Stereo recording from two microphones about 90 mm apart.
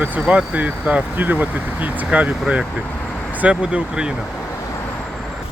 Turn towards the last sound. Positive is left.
turn(degrees=-10)  # may be behind; listen again after turning